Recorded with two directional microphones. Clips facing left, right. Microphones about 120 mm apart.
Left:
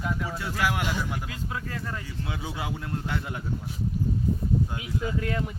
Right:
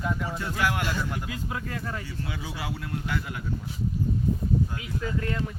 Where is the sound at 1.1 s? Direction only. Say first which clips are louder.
Right 1 dB; centre (ahead or behind).